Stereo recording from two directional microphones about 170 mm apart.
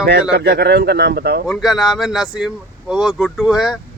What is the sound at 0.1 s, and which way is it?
Speech, 75° right (ahead or behind).